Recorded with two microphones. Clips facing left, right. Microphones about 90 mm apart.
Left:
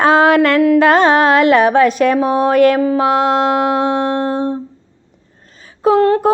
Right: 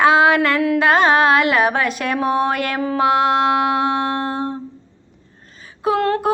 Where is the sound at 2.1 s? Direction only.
25° left (ahead or behind).